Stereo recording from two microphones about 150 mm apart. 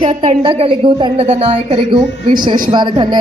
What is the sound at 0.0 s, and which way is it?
A woman's voice, 45° right (ahead or behind).